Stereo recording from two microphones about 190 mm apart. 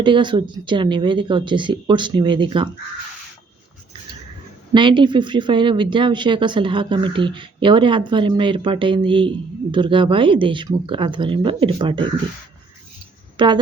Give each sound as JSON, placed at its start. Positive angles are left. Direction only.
{"t": 0.0, "sound": "speech", "side_deg": -25}
{"t": 4.7, "sound": "speech", "side_deg": -25}
{"t": 13.3, "sound": "a woman's voice", "side_deg": -25}